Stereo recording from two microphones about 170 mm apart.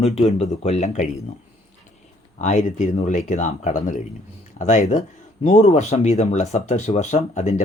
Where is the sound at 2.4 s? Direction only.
45° left (ahead or behind).